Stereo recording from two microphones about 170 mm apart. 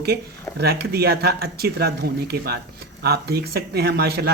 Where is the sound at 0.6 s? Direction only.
70° right (ahead or behind).